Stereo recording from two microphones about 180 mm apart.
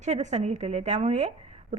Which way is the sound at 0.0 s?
40° right (ahead or behind).